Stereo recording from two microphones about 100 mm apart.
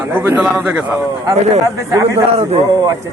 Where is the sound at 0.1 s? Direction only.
20° right (ahead or behind).